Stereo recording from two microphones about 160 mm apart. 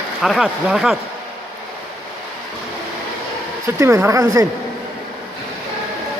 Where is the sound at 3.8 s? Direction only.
20° right (ahead or behind).